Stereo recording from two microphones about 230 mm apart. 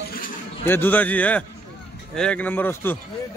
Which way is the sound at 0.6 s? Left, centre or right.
Centre.